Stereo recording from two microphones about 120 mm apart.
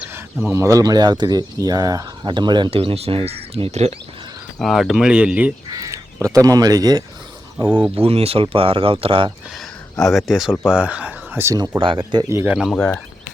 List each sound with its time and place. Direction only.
0.0 s speech: 15° right (ahead or behind); by 2.6 s 40° right (ahead or behind)
2.6 s speech: 55° right (ahead or behind)
4.6 s speech: centre (ahead or behind)
5.6 s speech: 30° right (ahead or behind)
7.7 s speech: 10° right (ahead or behind)
7.9 s speech: 55° right (ahead or behind)
10.0 s speech: centre (ahead or behind)
10.5 s speech: 15° left (ahead or behind)
10.8 s speech: 10° right (ahead or behind); by 12.5 s 25° right (ahead or behind)
12.5 s speech: centre (ahead or behind)